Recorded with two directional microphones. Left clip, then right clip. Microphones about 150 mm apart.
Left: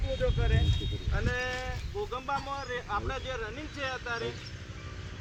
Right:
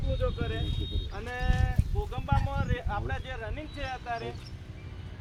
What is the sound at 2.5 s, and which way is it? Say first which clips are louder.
Speech: left 1 dB; 45° right (ahead or behind).